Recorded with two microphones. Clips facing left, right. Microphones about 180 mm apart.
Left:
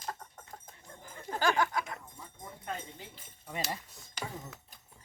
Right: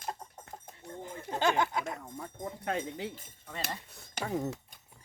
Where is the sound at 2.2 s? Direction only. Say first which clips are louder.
Right 8 dB; 75° right (ahead or behind).